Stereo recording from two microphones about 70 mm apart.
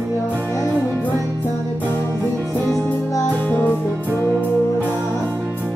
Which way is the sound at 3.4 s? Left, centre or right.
Left.